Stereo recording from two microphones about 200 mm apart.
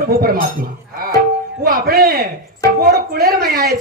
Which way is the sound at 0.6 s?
45° right (ahead or behind).